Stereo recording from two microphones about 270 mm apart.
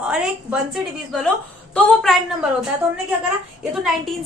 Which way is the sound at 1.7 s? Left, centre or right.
Centre.